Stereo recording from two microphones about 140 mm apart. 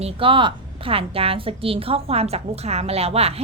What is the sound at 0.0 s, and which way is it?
A woman's voice, 40° right (ahead or behind).